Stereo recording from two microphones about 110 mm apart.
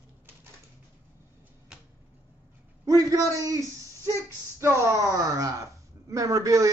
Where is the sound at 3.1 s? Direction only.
30° right (ahead or behind).